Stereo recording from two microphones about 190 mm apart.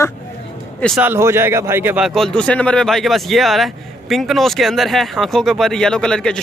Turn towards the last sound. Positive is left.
turn(degrees=5)  # may be behind; listen again after turning